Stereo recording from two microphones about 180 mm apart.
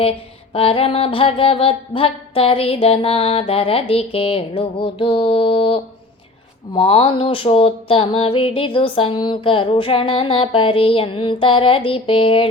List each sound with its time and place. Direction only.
0.0 s mantra: 30° left (ahead or behind)
6.7 s music: 30° left (ahead or behind)